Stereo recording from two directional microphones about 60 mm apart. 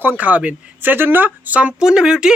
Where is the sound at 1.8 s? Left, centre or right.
Centre.